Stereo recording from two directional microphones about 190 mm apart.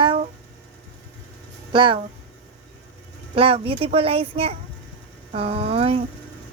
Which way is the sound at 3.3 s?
30° right (ahead or behind).